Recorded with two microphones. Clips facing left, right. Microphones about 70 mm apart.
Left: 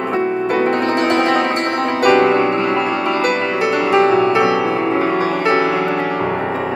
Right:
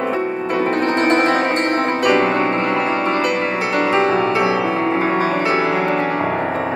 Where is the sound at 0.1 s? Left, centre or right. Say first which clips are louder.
Left 3 dB; left.